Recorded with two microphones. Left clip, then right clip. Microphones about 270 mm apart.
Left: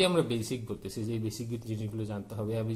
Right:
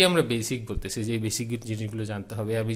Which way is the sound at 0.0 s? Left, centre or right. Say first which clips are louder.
Right 5 dB; right.